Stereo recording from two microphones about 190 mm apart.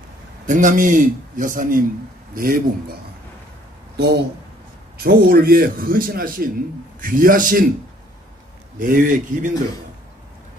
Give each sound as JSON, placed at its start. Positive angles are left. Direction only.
{"t": 0.5, "sound": "a man's voice", "side_deg": -40}
{"t": 3.9, "sound": "a man's voice", "side_deg": -60}
{"t": 8.7, "sound": "a man's voice", "side_deg": -45}